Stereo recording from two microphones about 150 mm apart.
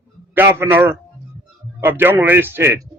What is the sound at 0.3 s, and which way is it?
A man's voice, 15° right (ahead or behind).